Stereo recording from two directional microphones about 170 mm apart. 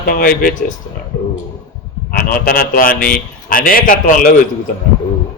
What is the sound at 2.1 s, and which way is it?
A man's voice, 55° left (ahead or behind).